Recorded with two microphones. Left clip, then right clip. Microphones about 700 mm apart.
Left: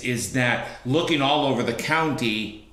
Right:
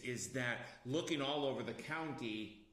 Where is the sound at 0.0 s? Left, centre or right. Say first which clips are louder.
Left 17 dB; centre.